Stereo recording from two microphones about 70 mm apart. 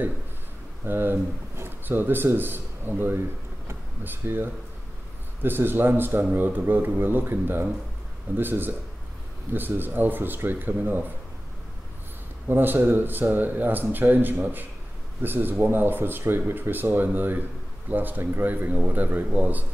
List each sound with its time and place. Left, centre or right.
0.8 s a man's voice: right
12.4 s speech: right